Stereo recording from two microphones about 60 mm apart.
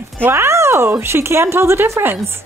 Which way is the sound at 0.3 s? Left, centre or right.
Right.